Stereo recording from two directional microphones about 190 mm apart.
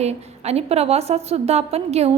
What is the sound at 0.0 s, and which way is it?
A woman's voice, 35° right (ahead or behind).